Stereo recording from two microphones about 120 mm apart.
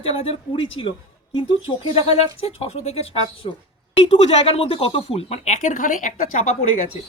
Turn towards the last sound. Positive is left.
turn(degrees=90)